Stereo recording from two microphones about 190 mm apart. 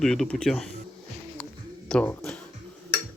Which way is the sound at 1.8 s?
5° left (ahead or behind).